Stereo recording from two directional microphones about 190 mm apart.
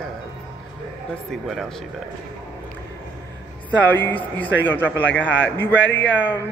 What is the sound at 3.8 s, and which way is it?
A man's voice, 10° left (ahead or behind).